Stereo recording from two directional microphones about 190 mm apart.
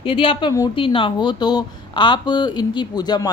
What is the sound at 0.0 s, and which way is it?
A woman's voice, 25° left (ahead or behind).